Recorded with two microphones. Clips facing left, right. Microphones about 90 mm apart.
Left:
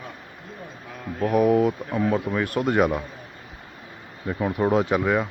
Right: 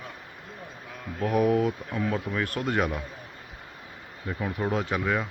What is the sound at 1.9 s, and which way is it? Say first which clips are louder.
Speech: left 6 dB; 30° left (ahead or behind).